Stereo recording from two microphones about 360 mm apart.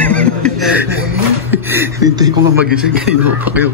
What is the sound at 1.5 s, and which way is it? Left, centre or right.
A man's voice, centre.